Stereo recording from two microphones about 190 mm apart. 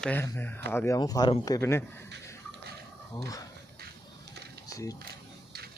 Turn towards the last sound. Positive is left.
turn(degrees=20)  # may be behind; listen again after turning